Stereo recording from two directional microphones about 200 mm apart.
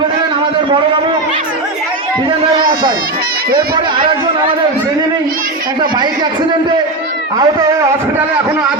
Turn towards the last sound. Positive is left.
turn(degrees=-15)  # may be behind; listen again after turning